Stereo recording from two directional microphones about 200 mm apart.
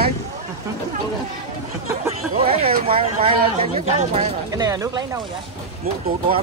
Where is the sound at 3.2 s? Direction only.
30° right (ahead or behind).